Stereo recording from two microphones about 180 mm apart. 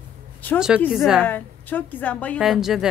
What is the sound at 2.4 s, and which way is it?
Speech, centre (ahead or behind).